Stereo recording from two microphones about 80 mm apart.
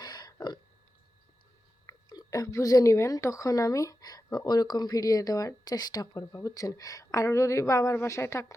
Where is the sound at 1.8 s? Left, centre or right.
Left.